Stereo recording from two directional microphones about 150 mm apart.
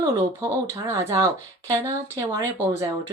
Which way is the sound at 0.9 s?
25° right (ahead or behind).